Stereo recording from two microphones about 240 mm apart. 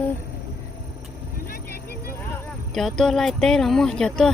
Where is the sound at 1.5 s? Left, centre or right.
Left.